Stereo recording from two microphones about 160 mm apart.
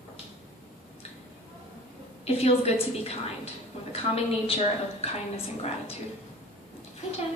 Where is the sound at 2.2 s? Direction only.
40° left (ahead or behind).